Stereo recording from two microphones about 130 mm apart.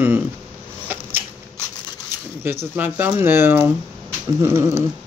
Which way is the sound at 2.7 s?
15° right (ahead or behind).